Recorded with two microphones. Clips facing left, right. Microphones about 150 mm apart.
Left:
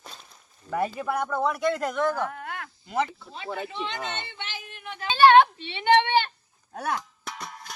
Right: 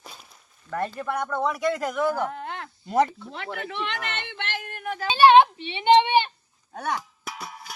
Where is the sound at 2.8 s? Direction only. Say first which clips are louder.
Right 6 dB; 45° right (ahead or behind).